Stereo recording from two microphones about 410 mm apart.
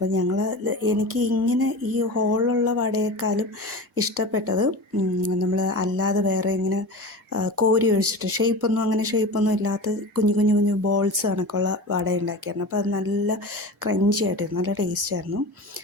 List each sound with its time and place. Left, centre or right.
0.1 s speech: right